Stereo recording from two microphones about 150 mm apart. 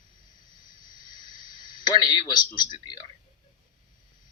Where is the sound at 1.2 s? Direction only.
30° left (ahead or behind).